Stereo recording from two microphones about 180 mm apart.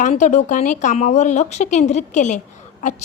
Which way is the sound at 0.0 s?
40° left (ahead or behind).